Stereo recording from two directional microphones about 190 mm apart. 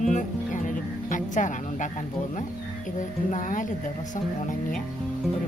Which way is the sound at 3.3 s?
45° left (ahead or behind).